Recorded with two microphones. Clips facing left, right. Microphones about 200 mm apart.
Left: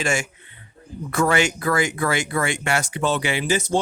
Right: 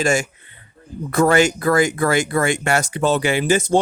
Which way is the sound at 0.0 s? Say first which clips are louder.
Right 5 dB; 40° right (ahead or behind).